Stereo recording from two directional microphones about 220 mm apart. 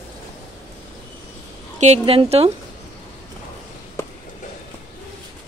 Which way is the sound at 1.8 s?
30° right (ahead or behind).